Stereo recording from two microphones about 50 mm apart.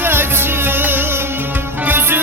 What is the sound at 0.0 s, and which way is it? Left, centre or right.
Music, right.